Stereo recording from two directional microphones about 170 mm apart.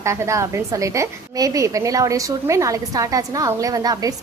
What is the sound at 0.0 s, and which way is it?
A woman's voice, 20° right (ahead or behind).